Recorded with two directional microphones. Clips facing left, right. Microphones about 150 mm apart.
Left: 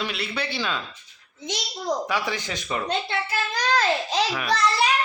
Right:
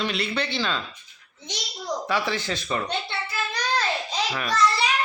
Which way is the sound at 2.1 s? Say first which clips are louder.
Right 1 dB; 15° left (ahead or behind).